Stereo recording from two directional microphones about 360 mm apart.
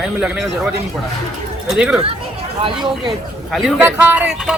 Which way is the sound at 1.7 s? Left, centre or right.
Centre.